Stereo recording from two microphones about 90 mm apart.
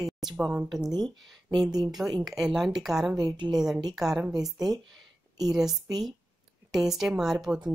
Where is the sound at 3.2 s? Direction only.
50° right (ahead or behind).